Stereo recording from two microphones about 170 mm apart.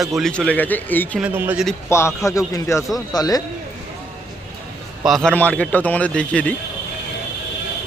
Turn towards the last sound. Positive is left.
turn(degrees=5)  # may be behind; listen again after turning